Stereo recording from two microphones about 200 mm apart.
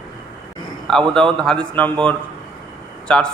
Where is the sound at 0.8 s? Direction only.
5° left (ahead or behind).